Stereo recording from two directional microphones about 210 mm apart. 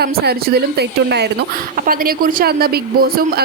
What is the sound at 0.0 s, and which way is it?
Speech, 50° right (ahead or behind).